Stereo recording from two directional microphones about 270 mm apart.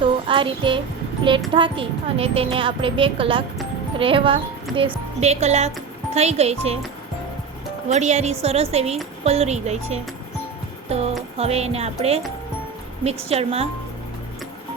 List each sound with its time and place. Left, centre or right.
0.0 s music: centre
1.5 s a woman's voice: centre
7.9 s a woman's voice: right
10.8 s music: right
11.3 s a woman's voice: right